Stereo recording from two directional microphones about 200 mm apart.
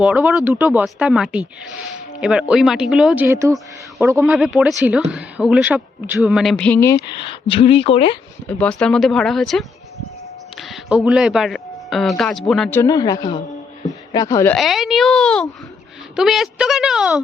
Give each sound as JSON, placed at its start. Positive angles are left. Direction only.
{"t": 0.0, "sound": "speech", "side_deg": -5}
{"t": 7.4, "sound": "speech", "side_deg": 25}
{"t": 8.4, "sound": "speech", "side_deg": 5}
{"t": 12.8, "sound": "a woman's voice", "side_deg": 20}
{"t": 14.5, "sound": "speech", "side_deg": 0}